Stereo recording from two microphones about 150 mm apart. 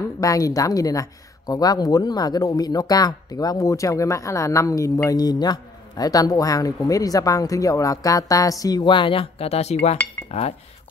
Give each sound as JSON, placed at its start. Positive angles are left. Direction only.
{"t": 0.2, "sound": "speech", "side_deg": 20}
{"t": 10.3, "sound": "cutlery", "side_deg": 45}